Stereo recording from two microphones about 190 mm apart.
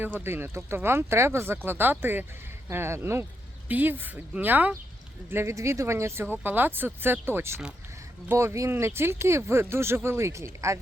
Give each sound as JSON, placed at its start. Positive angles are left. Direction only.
{"t": 0.0, "sound": "speech", "side_deg": -10}